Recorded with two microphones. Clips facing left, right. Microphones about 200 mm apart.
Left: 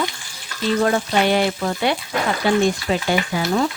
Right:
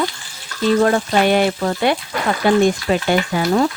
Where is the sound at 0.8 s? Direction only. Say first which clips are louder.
Right 2 dB; 50° right (ahead or behind).